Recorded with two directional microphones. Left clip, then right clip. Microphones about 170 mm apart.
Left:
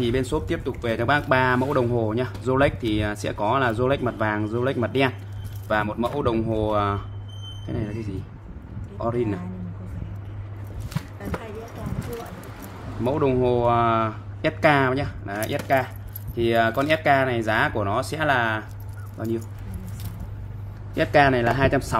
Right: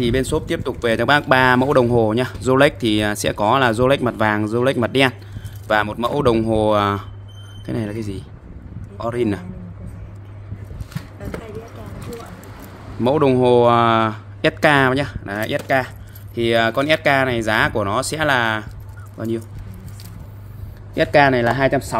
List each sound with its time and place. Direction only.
0.0 s speech: 55° right (ahead or behind)
13.0 s speech: 60° right (ahead or behind)
20.9 s speech: 40° right (ahead or behind)